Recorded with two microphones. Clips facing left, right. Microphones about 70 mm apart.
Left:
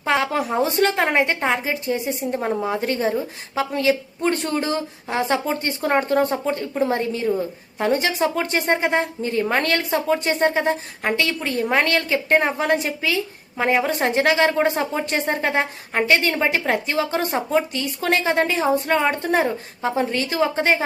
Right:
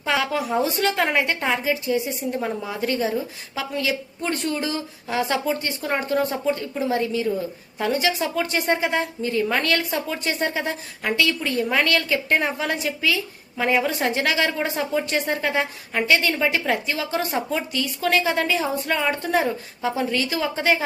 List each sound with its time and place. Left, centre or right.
0.0 s speech: left